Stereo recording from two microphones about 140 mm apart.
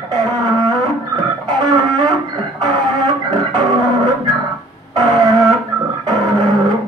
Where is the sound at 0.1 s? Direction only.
30° right (ahead or behind).